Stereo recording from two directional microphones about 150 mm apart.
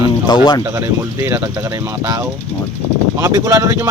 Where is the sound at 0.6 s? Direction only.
15° right (ahead or behind).